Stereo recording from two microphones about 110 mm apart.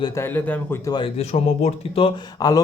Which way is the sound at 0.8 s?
40° left (ahead or behind).